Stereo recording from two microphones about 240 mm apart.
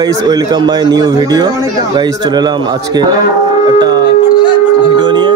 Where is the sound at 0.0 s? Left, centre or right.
Centre.